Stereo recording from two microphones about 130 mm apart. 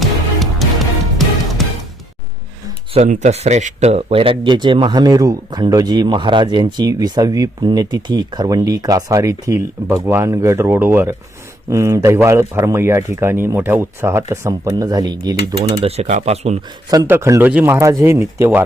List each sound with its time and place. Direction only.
0.0 s music: centre (ahead or behind)
2.9 s speech: 65° right (ahead or behind); by 15.8 s 30° right (ahead or behind)
15.8 s speech: 55° right (ahead or behind)
17.1 s speech: 20° right (ahead or behind)